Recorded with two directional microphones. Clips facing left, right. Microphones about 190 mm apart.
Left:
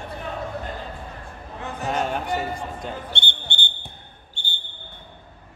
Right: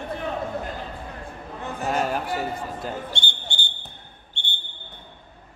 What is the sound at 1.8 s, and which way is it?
A man's voice, 5° right (ahead or behind).